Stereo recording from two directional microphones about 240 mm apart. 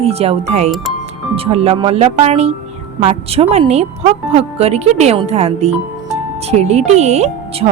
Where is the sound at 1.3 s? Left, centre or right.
Right.